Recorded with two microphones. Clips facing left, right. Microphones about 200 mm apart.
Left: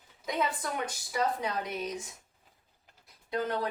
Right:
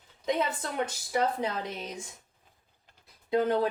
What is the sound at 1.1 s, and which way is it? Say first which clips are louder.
Speech: right 2 dB; 25° right (ahead or behind).